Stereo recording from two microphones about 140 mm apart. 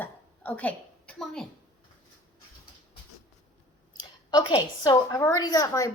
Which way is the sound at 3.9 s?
30° left (ahead or behind).